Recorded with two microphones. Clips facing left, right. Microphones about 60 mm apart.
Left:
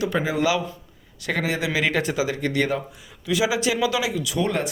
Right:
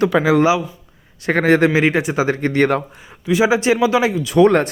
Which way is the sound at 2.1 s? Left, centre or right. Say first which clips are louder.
Right 6 dB; right.